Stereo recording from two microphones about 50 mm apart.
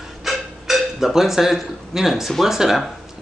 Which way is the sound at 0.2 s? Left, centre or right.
Centre.